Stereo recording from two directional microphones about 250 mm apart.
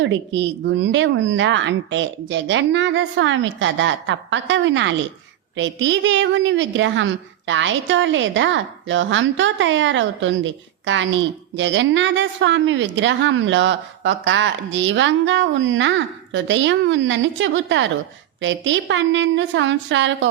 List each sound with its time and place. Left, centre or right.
0.0 s a woman's voice: right